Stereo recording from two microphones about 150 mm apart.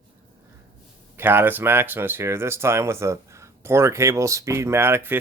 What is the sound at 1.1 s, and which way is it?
Speech, 15° right (ahead or behind).